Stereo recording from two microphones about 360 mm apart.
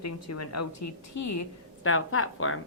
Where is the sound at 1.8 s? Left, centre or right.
Left.